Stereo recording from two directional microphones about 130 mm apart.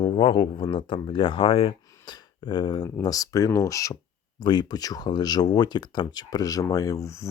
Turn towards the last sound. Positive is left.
turn(degrees=25)  # may be behind; listen again after turning